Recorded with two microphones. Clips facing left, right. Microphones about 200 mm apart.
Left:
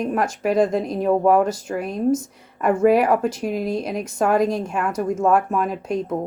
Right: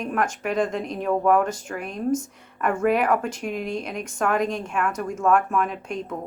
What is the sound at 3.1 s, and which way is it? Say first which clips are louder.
Speech: left 4 dB; 40° left (ahead or behind).